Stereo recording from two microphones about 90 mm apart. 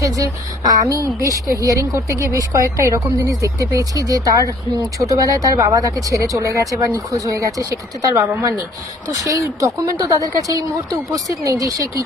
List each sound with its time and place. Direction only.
0.0 s a woman's voice: 40° right (ahead or behind)
9.1 s a woman's voice: 40° right (ahead or behind)